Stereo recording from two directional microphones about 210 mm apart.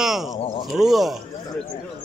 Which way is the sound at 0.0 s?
Centre (ahead or behind).